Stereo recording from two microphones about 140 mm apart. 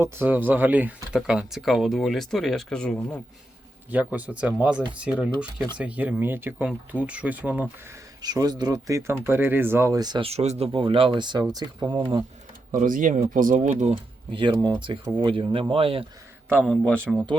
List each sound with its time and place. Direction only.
0.0 s speech: 15° right (ahead or behind); by 3.2 s 5° left (ahead or behind)
4.1 s speech: 10° right (ahead or behind)
8.2 s speech: 30° right (ahead or behind)
10.2 s speech: 50° right (ahead or behind)
10.7 s speech: 35° right (ahead or behind)
12.7 s speech: 75° right (ahead or behind)
13.9 s speech: 35° right (ahead or behind)
16.6 s a man's voice: 10° left (ahead or behind)